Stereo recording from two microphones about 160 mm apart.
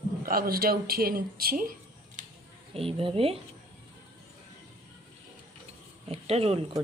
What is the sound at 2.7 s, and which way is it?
Speech, 35° right (ahead or behind).